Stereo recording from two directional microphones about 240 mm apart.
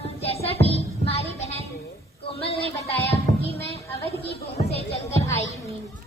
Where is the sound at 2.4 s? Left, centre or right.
Left.